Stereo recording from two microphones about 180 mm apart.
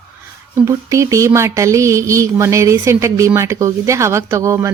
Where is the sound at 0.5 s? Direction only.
15° right (ahead or behind).